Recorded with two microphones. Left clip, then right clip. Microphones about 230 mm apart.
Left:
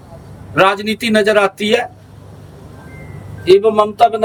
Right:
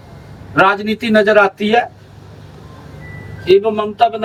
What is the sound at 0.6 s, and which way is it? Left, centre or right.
A man's voice, centre.